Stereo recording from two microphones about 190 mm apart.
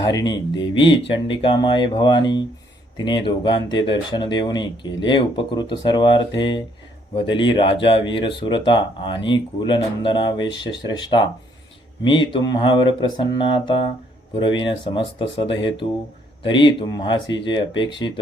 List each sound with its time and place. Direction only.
0.0 s speech: 20° left (ahead or behind)
14.9 s speech: 25° left (ahead or behind)